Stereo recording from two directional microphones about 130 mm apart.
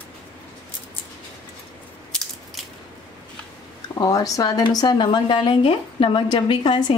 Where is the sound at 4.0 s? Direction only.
30° left (ahead or behind).